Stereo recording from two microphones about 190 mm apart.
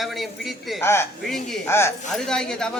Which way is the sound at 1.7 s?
15° left (ahead or behind).